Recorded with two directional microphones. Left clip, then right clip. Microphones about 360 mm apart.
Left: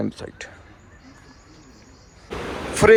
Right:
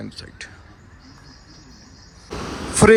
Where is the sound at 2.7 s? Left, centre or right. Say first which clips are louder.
Even; centre.